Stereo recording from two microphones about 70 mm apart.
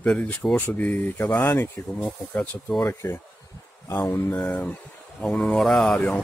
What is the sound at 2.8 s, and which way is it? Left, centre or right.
Speech, left.